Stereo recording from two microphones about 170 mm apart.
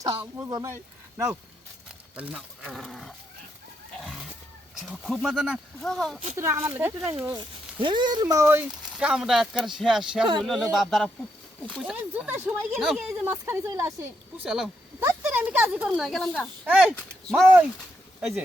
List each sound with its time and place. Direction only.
0.2 s a woman's voice: 20° right (ahead or behind); by 3.1 s centre (ahead or behind)
4.8 s speech: centre (ahead or behind)
6.3 s a woman's voice: 15° right (ahead or behind)
7.3 s a woman's voice: 25° right (ahead or behind)
14.4 s speech: centre (ahead or behind)
15.0 s a sound: 10° right (ahead or behind)
16.0 s speech: 5° left (ahead or behind)
16.6 s a woman's voice: 5° right (ahead or behind)
17.0 s speech: 5° left (ahead or behind)
17.4 s a woman's voice: 10° right (ahead or behind)